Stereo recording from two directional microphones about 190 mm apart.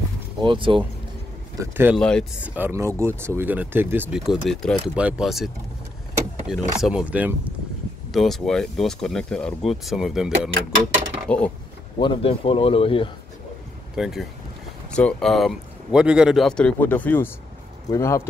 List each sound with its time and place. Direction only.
0.4 s speech: 25° right (ahead or behind)
1.6 s speech: 10° right (ahead or behind)
2.0 s speech: 5° left (ahead or behind)
2.4 s speech: 10° right (ahead or behind)
4.2 s speech: centre (ahead or behind)
6.8 s speech: 5° right (ahead or behind)
12.0 s speech: 25° left (ahead or behind)
13.9 s speech: centre (ahead or behind); by 18.2 s 15° left (ahead or behind)